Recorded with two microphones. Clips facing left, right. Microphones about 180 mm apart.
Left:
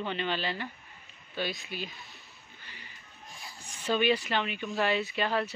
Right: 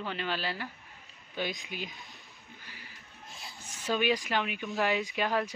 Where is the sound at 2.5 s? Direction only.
10° right (ahead or behind).